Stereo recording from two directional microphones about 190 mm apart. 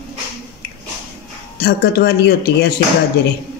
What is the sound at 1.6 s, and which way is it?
Speech, 55° left (ahead or behind).